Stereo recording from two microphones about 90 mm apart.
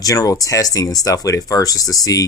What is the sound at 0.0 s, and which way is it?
Speech, 40° left (ahead or behind).